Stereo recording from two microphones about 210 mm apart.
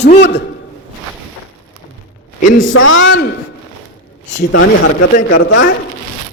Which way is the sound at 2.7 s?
70° left (ahead or behind).